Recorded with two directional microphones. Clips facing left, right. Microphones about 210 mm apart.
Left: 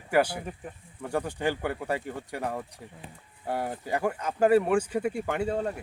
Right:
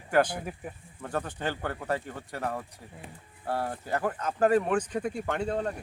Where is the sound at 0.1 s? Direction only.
10° left (ahead or behind).